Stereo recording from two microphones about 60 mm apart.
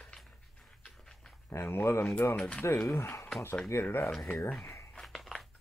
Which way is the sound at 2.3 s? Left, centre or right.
Centre.